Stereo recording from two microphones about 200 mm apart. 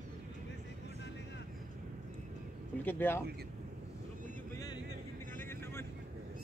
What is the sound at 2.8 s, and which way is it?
Speech, 10° left (ahead or behind).